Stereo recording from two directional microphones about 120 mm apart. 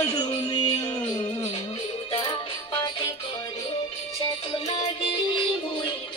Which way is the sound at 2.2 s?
40° left (ahead or behind).